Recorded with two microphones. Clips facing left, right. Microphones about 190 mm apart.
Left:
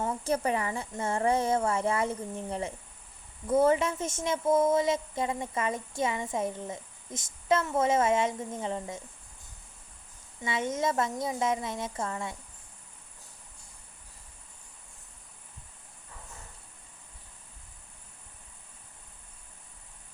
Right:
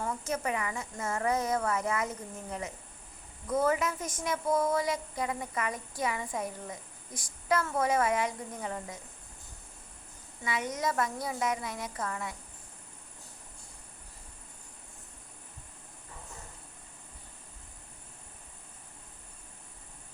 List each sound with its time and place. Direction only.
0.0 s a woman's voice: 30° left (ahead or behind)
10.4 s a woman's voice: 25° left (ahead or behind)